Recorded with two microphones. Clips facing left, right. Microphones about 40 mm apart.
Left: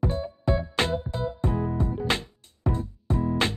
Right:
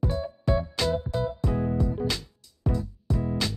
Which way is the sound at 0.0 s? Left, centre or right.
Left.